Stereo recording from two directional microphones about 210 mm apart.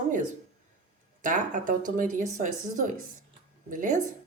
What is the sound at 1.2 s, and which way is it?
Speech, 40° right (ahead or behind).